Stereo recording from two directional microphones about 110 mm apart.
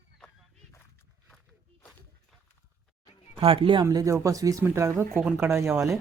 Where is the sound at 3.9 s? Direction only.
30° right (ahead or behind).